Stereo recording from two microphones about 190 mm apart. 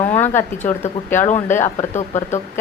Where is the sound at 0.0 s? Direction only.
35° left (ahead or behind).